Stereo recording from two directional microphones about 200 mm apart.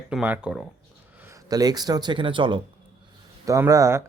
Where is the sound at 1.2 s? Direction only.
15° right (ahead or behind).